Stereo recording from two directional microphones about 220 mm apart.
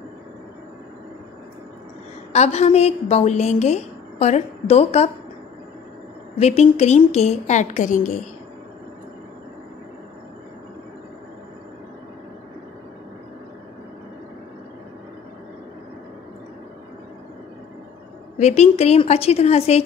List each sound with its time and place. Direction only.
2.3 s a woman's voice: 30° left (ahead or behind)
6.4 s a woman's voice: 30° left (ahead or behind)
18.4 s a woman's voice: 30° left (ahead or behind)